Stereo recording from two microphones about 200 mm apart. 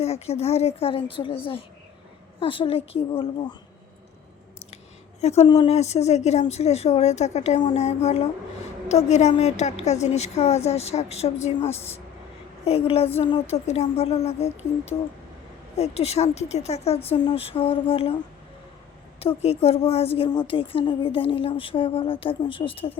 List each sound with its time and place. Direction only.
0.0 s a woman's voice: 30° left (ahead or behind)
2.4 s a woman's voice: 25° left (ahead or behind)
5.2 s a woman's voice: 30° left (ahead or behind)
19.4 s a woman's voice: 30° left (ahead or behind)